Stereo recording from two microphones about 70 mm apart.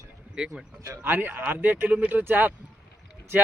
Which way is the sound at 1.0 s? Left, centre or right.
Right.